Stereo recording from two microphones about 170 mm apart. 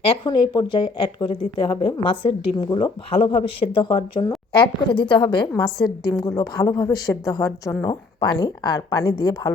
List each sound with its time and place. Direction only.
0.3 s a woman's voice: 25° left (ahead or behind)